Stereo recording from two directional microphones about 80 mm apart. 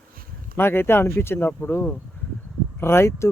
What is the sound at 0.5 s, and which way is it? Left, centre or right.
Speech, left.